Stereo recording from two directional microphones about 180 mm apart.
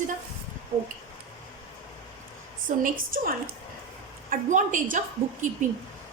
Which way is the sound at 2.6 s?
50° right (ahead or behind).